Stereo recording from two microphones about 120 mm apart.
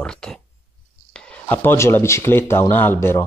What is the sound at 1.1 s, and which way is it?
Speech, 15° left (ahead or behind).